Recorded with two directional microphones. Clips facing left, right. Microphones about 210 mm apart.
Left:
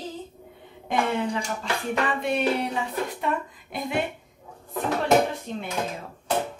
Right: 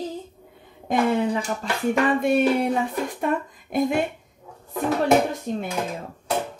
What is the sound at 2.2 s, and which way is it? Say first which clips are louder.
Speech: right 5 dB; 50° right (ahead or behind).